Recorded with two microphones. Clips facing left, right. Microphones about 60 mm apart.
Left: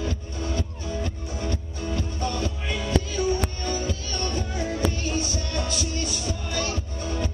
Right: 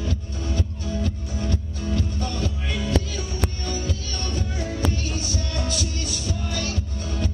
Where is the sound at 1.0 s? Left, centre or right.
Centre.